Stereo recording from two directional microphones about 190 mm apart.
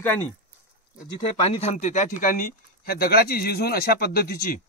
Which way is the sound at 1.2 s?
35° left (ahead or behind).